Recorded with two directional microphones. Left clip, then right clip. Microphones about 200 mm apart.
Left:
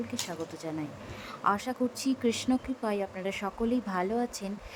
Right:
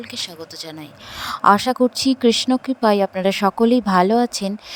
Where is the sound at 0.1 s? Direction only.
45° right (ahead or behind).